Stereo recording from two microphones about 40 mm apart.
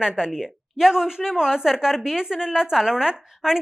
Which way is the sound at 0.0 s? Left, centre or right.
Centre.